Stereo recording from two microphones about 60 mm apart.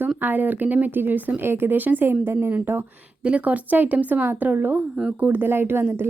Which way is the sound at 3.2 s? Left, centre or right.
Right.